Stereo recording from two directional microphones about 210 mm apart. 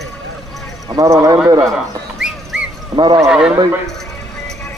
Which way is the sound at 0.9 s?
15° right (ahead or behind).